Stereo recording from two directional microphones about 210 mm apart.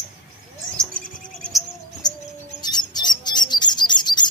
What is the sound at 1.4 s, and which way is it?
Bird, centre (ahead or behind).